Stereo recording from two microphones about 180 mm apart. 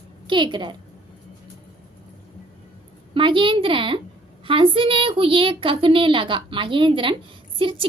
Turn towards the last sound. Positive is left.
turn(degrees=-30)  # may be behind; listen again after turning